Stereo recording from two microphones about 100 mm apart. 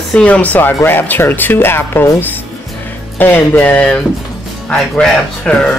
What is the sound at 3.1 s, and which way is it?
Speech, 20° left (ahead or behind).